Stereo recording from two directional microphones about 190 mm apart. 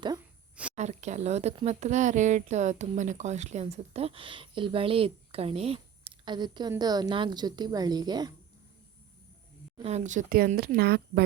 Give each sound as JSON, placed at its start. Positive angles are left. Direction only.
{"t": 0.8, "sound": "a woman's voice", "side_deg": -35}
{"t": 9.8, "sound": "speech", "side_deg": -35}